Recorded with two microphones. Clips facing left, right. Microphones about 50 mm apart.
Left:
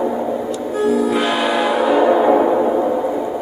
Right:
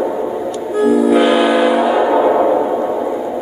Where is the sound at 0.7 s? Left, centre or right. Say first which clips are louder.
Right 5 dB; centre.